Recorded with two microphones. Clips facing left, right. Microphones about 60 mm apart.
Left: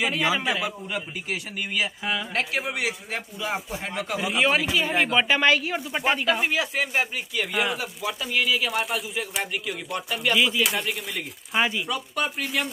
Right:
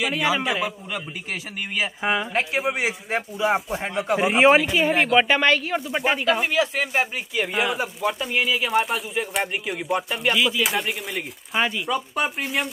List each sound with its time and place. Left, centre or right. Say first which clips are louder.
0.0 s speech: right 1 dB; centre
4.1 s speech: right 7 dB; right
4.6 s speech: right 4 dB; centre